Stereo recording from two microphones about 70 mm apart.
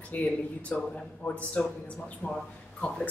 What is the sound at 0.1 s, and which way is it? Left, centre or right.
Speech, left.